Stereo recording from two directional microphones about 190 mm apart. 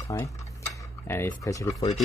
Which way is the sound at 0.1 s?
15° left (ahead or behind).